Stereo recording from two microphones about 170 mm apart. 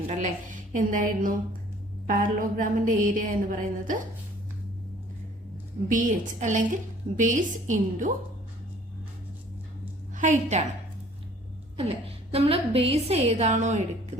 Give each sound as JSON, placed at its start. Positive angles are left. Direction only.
{"t": 0.1, "sound": "a woman's voice", "side_deg": -45}
{"t": 5.9, "sound": "a woman's voice", "side_deg": -50}
{"t": 10.2, "sound": "a woman's voice", "side_deg": -45}
{"t": 11.8, "sound": "a woman's voice", "side_deg": -35}